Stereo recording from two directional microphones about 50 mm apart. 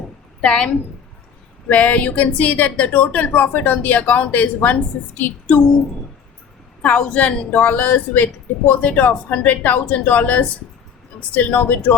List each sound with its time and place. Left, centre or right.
0.4 s a woman's voice: centre
1.7 s speech: left
6.8 s a woman's voice: centre
7.7 s speech: left